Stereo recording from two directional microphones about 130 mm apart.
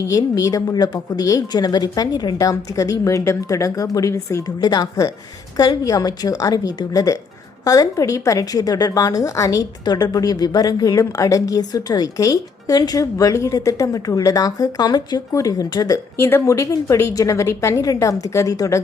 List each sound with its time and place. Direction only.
0.0 s a woman's voice: 25° left (ahead or behind)